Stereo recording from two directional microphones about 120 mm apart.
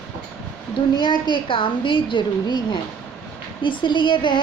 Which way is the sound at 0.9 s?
40° left (ahead or behind).